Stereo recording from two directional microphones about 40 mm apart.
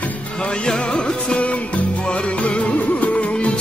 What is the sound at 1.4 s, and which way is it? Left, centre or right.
Music, left.